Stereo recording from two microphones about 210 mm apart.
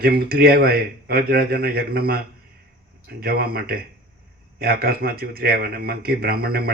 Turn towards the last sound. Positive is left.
turn(degrees=-45)  # may be behind; listen again after turning